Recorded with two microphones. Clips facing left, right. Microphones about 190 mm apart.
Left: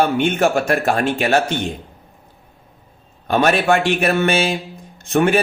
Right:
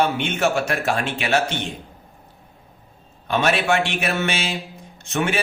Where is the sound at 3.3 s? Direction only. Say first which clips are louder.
Left 4 dB; 50° left (ahead or behind).